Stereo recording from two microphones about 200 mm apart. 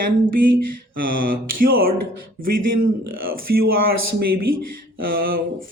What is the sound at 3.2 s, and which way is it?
Speech, 50° right (ahead or behind).